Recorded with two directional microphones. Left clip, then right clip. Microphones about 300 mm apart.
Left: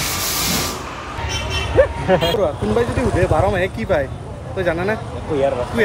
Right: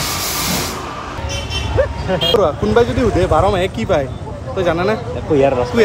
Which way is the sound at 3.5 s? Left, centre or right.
Centre.